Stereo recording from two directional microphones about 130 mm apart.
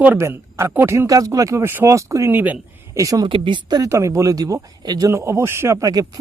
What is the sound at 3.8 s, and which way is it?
Speech, 20° right (ahead or behind).